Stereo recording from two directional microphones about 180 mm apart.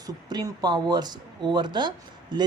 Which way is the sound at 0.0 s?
20° right (ahead or behind).